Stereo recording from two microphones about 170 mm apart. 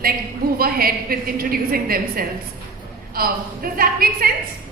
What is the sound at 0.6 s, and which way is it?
A woman's voice, 60° right (ahead or behind).